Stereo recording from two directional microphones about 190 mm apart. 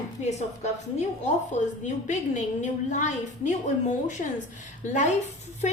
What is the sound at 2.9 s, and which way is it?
A woman's voice, 40° left (ahead or behind).